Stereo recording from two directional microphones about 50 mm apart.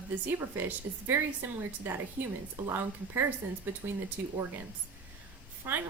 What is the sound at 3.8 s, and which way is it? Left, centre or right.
Speech, right.